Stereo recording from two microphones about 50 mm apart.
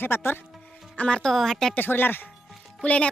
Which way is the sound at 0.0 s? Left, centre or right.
Left.